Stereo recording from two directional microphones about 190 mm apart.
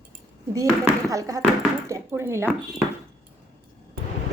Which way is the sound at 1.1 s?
15° right (ahead or behind).